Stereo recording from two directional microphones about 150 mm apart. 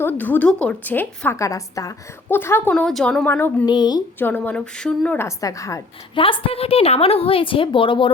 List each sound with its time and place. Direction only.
0.0 s a woman's voice: 10° left (ahead or behind)
3.7 s a woman's voice: 30° left (ahead or behind)
4.2 s a woman's voice: 10° left (ahead or behind)
6.1 s a woman's voice: 35° left (ahead or behind)